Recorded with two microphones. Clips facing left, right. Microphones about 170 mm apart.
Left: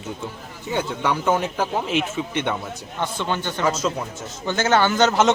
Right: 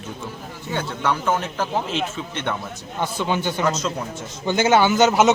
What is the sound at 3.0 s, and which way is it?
Speech, 10° right (ahead or behind).